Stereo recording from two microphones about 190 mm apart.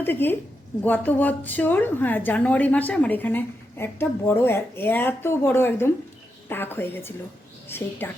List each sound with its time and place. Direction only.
0.0 s a woman's voice: 10° left (ahead or behind)